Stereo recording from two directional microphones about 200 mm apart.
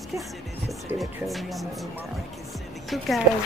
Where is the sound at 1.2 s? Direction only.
Centre (ahead or behind).